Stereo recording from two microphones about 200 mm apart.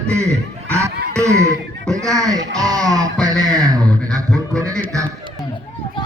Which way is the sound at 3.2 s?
20° right (ahead or behind).